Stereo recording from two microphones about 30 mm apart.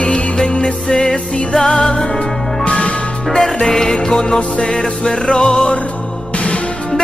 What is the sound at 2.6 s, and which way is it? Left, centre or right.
Music, left.